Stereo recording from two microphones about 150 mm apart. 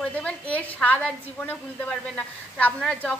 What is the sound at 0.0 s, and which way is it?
Speech, 10° left (ahead or behind).